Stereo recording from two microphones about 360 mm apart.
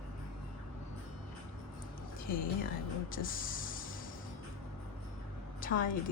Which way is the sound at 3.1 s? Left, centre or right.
Left.